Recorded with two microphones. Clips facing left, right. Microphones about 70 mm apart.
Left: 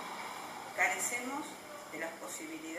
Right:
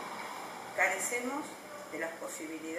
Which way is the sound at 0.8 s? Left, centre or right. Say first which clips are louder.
Right 3 dB; centre.